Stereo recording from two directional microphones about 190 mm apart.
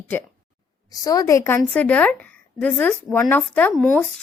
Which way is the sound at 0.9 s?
20° left (ahead or behind).